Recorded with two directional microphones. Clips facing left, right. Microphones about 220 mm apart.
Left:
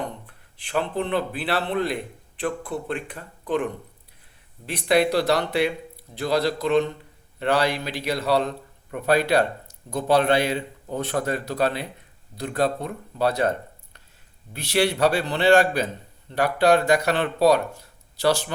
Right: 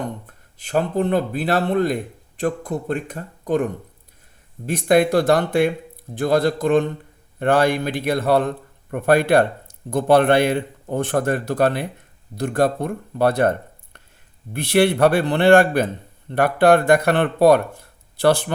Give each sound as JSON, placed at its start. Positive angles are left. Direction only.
{"t": 0.0, "sound": "a man's voice", "side_deg": -45}
{"t": 14.5, "sound": "a man's voice", "side_deg": -55}